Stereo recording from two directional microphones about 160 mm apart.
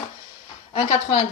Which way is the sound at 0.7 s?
40° left (ahead or behind).